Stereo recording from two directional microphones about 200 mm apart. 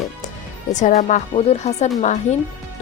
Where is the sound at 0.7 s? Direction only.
35° left (ahead or behind).